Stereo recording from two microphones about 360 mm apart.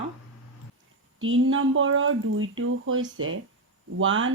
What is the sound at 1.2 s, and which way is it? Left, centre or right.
Speech, right.